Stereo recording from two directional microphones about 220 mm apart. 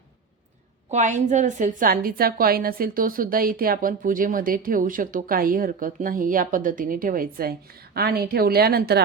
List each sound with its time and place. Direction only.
0.9 s a woman's voice: 35° right (ahead or behind)